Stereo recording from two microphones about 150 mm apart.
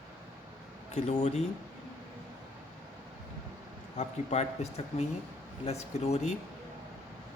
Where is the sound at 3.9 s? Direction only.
45° left (ahead or behind).